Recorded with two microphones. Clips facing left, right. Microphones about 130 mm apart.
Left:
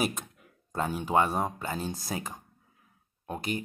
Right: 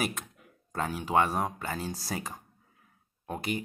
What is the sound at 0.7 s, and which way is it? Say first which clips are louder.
Speech: left 1 dB; 20° left (ahead or behind).